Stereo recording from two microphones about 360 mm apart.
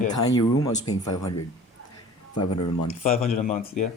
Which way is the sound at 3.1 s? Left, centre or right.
Left.